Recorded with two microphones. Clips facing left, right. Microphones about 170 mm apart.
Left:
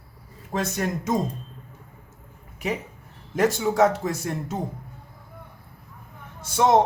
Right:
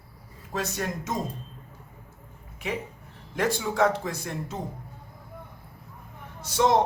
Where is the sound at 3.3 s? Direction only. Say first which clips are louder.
Left 5 dB; 45° left (ahead or behind).